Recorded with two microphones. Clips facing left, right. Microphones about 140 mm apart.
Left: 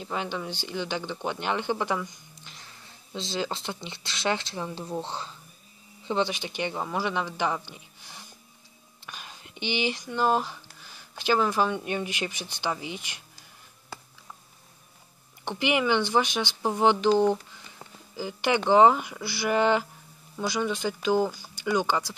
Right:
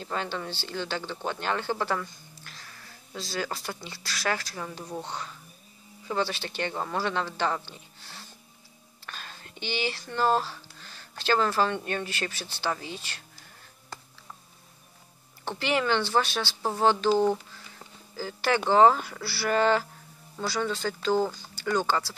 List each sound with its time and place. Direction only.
0.0 s a child's voice: 15° left (ahead or behind)
15.4 s speech: 15° left (ahead or behind)
18.1 s speech: 15° left (ahead or behind)